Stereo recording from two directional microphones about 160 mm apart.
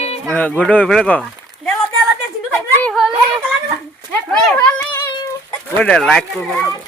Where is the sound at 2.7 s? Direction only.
5° left (ahead or behind).